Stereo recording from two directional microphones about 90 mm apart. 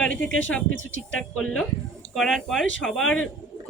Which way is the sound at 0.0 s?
10° left (ahead or behind).